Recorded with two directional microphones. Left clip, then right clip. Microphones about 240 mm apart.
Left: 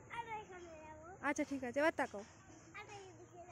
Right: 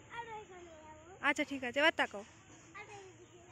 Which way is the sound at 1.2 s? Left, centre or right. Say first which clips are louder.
Right 6 dB; centre.